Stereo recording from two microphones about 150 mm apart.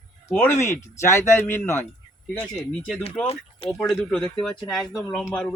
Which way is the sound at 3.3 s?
40° left (ahead or behind).